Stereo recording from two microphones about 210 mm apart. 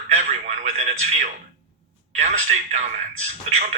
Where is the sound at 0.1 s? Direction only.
35° right (ahead or behind).